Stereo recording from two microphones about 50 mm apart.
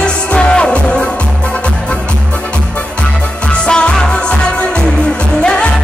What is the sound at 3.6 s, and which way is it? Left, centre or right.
Music, centre.